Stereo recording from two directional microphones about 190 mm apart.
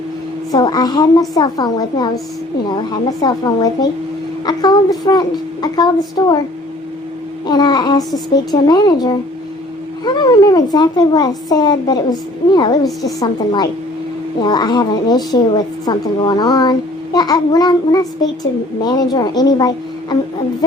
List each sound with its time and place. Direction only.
0.5 s a woman's voice: 20° left (ahead or behind)
7.4 s a woman's voice: 20° left (ahead or behind)